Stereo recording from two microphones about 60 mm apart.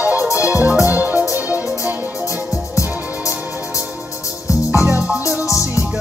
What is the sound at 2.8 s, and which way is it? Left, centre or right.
Music, left.